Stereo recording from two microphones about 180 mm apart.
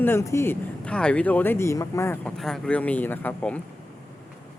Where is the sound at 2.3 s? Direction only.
5° left (ahead or behind).